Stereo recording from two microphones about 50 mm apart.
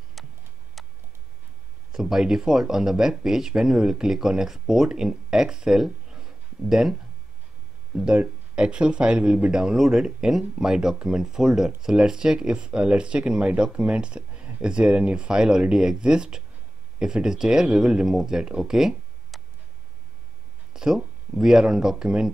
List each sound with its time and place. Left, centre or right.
0.2 s a sound: centre
0.8 s tick-tock: centre
1.9 s speech: centre
19.3 s tick: centre
20.7 s speech: centre